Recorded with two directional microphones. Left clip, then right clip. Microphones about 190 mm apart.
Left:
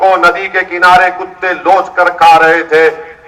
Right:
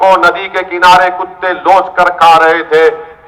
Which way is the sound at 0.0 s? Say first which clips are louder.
Right 1 dB; 50° left (ahead or behind).